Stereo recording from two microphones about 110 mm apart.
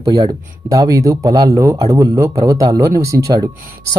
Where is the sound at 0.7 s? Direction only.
30° right (ahead or behind).